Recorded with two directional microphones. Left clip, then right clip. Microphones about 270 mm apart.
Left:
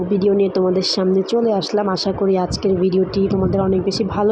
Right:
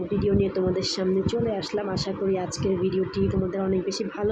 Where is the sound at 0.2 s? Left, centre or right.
Centre.